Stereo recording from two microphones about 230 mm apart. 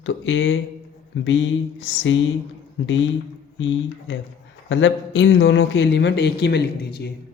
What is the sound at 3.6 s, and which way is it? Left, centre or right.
Speech, left.